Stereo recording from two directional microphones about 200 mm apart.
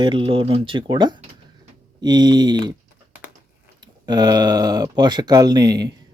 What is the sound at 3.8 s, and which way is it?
Speech, 20° right (ahead or behind).